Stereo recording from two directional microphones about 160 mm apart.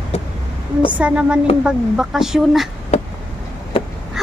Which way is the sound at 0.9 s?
10° right (ahead or behind).